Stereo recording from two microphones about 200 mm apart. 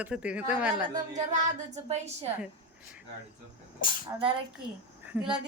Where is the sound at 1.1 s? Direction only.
40° right (ahead or behind).